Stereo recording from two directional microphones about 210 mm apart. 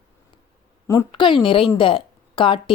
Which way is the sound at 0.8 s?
20° left (ahead or behind).